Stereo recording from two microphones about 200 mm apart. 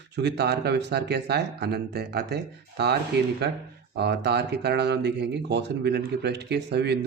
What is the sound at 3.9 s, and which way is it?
Speech, 55° right (ahead or behind).